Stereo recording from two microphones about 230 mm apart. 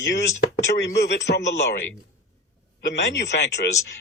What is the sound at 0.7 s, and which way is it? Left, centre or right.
A man's voice, left.